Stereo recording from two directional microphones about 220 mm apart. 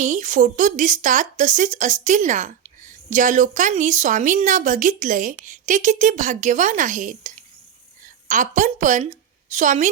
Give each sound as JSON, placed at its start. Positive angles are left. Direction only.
{"t": 0.0, "sound": "a woman's voice", "side_deg": -35}